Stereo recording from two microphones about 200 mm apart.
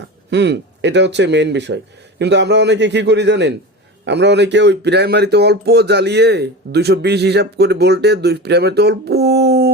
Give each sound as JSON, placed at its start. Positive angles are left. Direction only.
{"t": 0.3, "sound": "speech", "side_deg": -60}